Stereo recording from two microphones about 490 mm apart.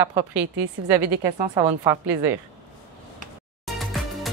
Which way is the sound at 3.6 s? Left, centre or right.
Centre.